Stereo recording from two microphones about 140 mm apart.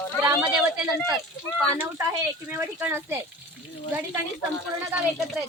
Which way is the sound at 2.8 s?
15° right (ahead or behind).